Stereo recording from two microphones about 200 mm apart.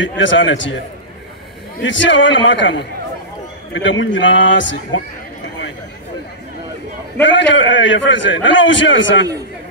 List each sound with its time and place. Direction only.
0.2 s a man's voice: 65° left (ahead or behind)
1.8 s a man's voice: 65° left (ahead or behind)
7.2 s a man's voice: 65° left (ahead or behind)